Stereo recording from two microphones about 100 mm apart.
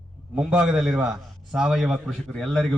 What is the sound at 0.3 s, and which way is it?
A man's voice, 10° right (ahead or behind).